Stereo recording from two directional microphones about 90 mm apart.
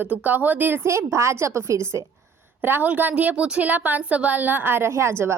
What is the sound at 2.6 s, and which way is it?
A woman's voice, 20° right (ahead or behind).